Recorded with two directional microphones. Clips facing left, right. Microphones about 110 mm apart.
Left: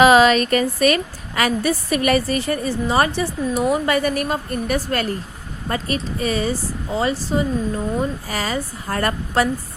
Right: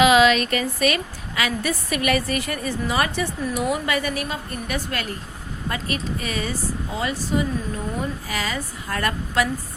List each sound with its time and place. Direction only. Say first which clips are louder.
0.0 s a woman's voice: left 3 dB; 40° left (ahead or behind)